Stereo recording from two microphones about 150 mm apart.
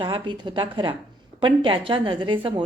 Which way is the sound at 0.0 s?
30° right (ahead or behind).